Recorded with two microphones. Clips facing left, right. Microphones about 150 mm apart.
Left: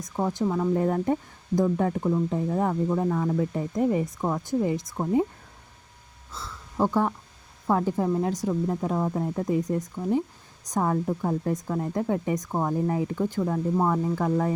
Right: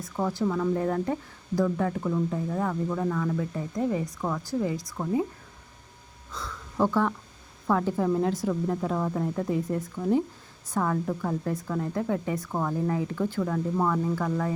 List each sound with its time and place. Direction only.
0.2 s speech: 20° left (ahead or behind)
6.7 s speech: 15° left (ahead or behind); by 14.5 s 30° left (ahead or behind)